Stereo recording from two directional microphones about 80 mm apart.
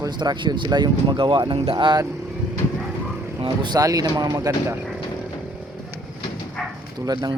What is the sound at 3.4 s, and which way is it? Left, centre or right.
Speech, right.